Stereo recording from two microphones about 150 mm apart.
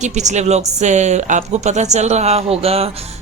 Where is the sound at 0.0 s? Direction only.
50° right (ahead or behind).